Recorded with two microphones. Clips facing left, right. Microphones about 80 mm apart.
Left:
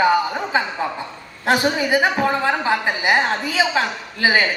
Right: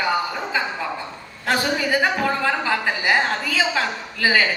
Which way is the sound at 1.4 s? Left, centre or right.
Left.